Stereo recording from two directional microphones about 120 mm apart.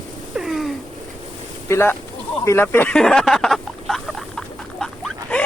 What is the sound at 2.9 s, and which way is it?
Rodents, 5° left (ahead or behind).